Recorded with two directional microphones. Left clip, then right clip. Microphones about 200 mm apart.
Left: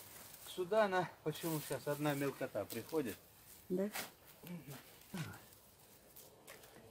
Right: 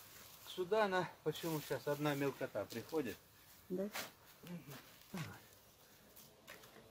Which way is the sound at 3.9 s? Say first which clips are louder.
Left 1 dB; centre (ahead or behind).